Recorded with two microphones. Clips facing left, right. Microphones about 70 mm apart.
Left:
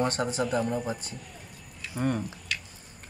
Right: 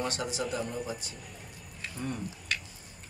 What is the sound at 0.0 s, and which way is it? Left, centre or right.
Speech, left.